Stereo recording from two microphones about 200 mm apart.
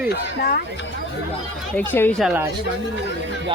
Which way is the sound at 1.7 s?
10° left (ahead or behind).